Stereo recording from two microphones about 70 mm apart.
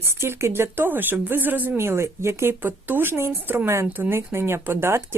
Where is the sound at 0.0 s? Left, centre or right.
Right.